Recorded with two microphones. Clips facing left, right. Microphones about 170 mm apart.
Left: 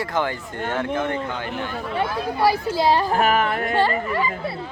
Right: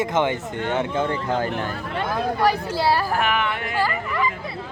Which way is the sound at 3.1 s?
40° left (ahead or behind).